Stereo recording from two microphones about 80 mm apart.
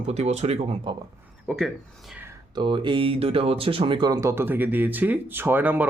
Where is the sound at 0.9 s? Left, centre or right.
Right.